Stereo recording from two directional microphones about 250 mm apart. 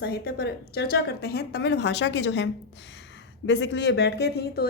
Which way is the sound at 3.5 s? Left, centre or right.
Left.